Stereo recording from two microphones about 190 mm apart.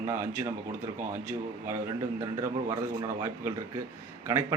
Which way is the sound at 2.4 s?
15° right (ahead or behind).